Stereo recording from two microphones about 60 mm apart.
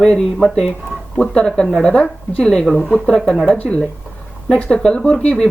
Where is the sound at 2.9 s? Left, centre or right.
Centre.